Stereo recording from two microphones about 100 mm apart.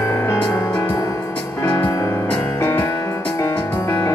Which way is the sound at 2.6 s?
20° left (ahead or behind).